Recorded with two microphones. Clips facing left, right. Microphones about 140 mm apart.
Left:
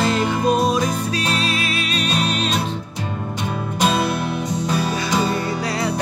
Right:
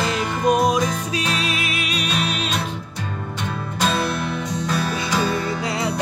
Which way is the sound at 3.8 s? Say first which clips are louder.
Left 2 dB; 20° left (ahead or behind).